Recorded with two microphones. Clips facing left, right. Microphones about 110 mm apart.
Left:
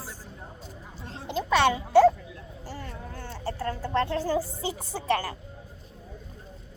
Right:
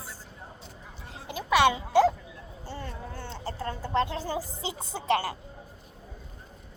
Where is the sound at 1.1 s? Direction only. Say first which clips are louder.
Left 2 dB; 10° right (ahead or behind).